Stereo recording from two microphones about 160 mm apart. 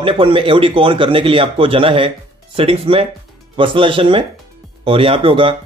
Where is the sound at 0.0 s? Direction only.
35° right (ahead or behind).